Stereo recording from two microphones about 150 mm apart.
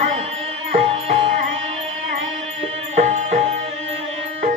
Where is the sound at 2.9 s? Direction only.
50° right (ahead or behind).